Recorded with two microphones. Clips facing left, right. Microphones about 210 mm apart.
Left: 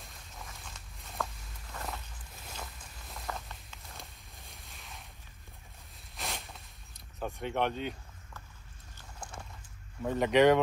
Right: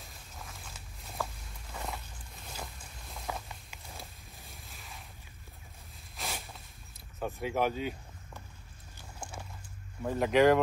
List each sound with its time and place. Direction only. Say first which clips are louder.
0.0 s walk: even; centre (ahead or behind)
3.9 s boat: right 3 dB; centre (ahead or behind)
6.1 s a sound: even; centre (ahead or behind)
7.2 s speech: right 1 dB; centre (ahead or behind)
8.9 s a sound: right 2 dB; 10° right (ahead or behind)
10.0 s speech: even; centre (ahead or behind)